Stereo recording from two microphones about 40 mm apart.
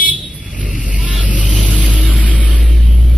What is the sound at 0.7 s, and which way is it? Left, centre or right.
Vehicle, right.